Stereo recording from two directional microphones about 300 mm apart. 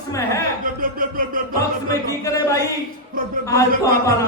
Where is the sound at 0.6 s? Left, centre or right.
Right.